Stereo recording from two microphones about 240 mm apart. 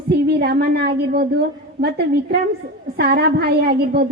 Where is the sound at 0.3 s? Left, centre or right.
Right.